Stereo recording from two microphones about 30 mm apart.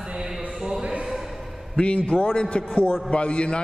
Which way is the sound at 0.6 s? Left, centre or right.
Right.